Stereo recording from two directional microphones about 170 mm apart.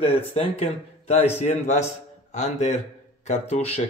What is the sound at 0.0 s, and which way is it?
Speech, 35° left (ahead or behind).